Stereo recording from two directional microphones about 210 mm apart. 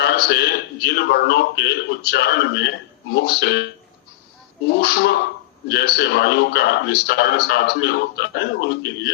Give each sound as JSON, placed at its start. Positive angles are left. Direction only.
{"t": 0.0, "sound": "a man's voice", "side_deg": 50}